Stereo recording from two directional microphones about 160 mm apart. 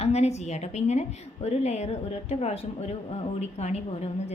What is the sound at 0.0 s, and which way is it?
A woman's voice, 40° left (ahead or behind).